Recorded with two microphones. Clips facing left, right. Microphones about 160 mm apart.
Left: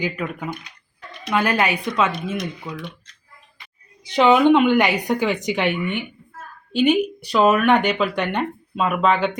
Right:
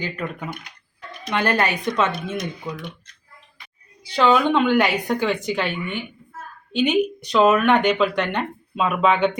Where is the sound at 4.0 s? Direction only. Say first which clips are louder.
Left 3 dB; 20° left (ahead or behind).